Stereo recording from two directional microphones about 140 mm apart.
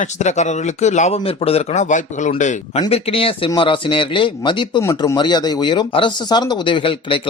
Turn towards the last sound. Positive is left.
turn(degrees=35)  # may be behind; listen again after turning